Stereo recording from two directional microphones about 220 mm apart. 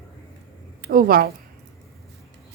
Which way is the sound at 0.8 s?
40° right (ahead or behind).